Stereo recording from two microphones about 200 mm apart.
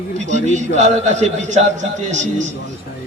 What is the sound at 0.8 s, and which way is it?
A man's voice, 35° right (ahead or behind).